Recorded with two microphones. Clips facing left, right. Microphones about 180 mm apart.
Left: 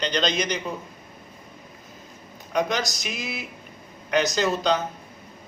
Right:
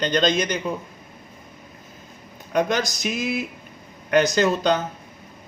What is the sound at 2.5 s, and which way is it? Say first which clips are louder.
A man's voice: right 3 dB; 50° right (ahead or behind).